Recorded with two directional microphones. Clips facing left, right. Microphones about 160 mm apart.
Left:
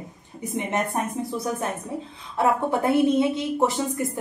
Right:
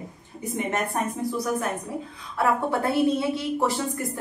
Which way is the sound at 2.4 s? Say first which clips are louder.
Left 2 dB; 20° left (ahead or behind).